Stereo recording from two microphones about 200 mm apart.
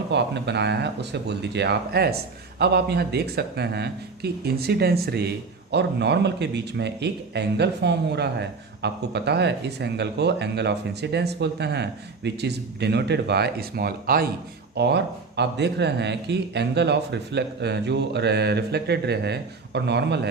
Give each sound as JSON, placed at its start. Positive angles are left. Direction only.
{"t": 0.1, "sound": "speech", "side_deg": -60}